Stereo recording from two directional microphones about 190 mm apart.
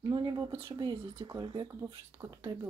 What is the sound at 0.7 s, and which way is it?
Speech, 25° right (ahead or behind).